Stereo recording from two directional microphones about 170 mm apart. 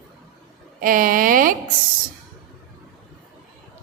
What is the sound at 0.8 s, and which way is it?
Speech, 55° right (ahead or behind).